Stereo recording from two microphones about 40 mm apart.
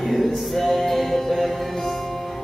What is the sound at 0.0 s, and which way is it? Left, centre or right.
Music, centre.